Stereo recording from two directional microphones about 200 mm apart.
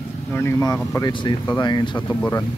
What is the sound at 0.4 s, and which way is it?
Speech, 15° left (ahead or behind).